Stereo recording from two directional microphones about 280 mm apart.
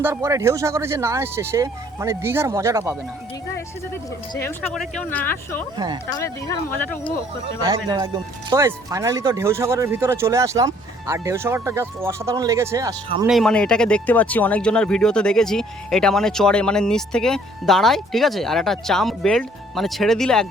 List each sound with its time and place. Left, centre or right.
0.0 s speech: centre
4.4 s speech: centre
5.7 s speech: centre
6.1 s speech: centre
7.4 s speech: centre
13.3 s speech: centre